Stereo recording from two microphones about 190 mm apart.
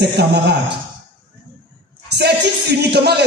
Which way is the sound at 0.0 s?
55° right (ahead or behind).